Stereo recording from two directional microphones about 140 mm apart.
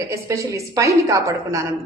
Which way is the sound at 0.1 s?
20° right (ahead or behind).